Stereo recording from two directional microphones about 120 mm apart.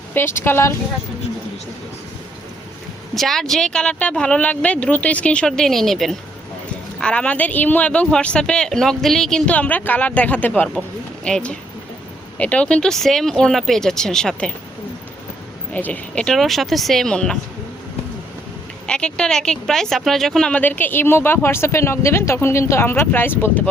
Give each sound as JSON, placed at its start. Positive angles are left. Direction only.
{"t": 0.3, "sound": "speech", "side_deg": 20}
{"t": 3.2, "sound": "speech", "side_deg": 0}
{"t": 15.7, "sound": "speech", "side_deg": 10}
{"t": 18.9, "sound": "speech", "side_deg": 10}